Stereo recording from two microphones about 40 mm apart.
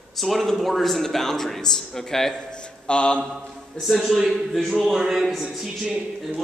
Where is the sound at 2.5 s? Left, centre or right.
Left.